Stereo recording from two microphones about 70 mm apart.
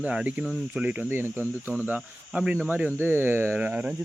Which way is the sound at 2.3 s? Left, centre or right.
Centre.